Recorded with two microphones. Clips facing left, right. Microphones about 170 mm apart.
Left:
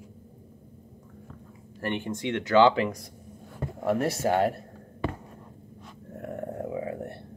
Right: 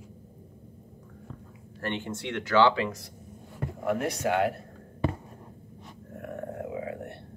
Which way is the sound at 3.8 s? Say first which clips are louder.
Left 2 dB; 40° left (ahead or behind).